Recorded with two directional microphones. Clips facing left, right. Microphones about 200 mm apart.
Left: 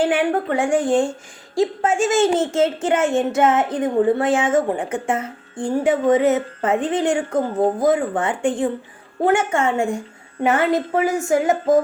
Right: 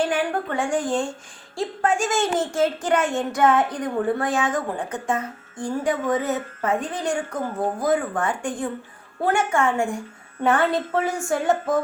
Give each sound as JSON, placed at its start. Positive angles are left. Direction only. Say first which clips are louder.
{"t": 0.0, "sound": "speech", "louder": "left 5 dB", "side_deg": 25}